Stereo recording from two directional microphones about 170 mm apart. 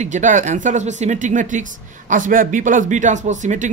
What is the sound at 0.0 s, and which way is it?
Speech, 45° right (ahead or behind).